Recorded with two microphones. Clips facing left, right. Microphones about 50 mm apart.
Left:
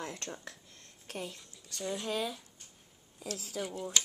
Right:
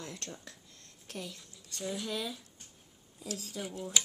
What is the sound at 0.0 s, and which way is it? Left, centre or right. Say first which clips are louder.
Speech: left 3 dB; left.